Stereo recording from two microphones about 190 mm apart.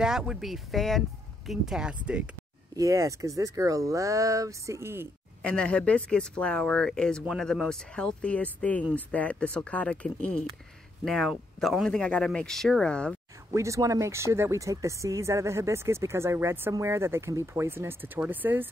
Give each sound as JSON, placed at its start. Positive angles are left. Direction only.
{"t": 0.0, "sound": "speech", "side_deg": -5}
{"t": 2.7, "sound": "speech", "side_deg": -15}
{"t": 5.4, "sound": "speech", "side_deg": 5}
{"t": 13.5, "sound": "speech", "side_deg": -15}